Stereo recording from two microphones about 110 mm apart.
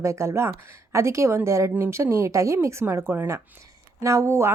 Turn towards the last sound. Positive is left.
turn(degrees=-25)  # may be behind; listen again after turning